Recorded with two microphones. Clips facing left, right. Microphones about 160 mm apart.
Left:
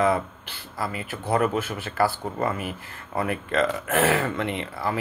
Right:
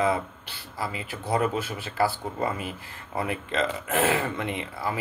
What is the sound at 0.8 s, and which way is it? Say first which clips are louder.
Speech: left 2 dB; 55° left (ahead or behind).